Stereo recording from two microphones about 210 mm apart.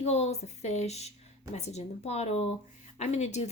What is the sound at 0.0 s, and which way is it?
Speech, 30° left (ahead or behind).